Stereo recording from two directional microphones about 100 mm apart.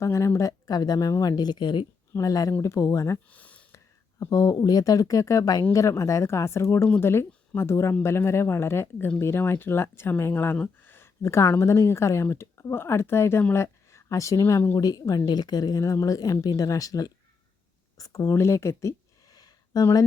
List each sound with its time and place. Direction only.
0.0 s speech: 30° left (ahead or behind); by 1.9 s 50° left (ahead or behind)
2.1 s speech: 35° left (ahead or behind)
3.2 s a sound: 15° left (ahead or behind)
4.3 s speech: 35° left (ahead or behind)
10.8 s a sound: 25° left (ahead or behind)
11.4 s speech: 25° left (ahead or behind)
14.8 s speech: 40° left (ahead or behind)